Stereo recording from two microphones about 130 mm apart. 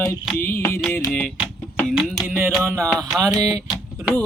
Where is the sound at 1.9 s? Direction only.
Centre (ahead or behind).